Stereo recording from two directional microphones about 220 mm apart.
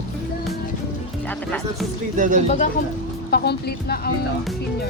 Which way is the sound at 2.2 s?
35° right (ahead or behind).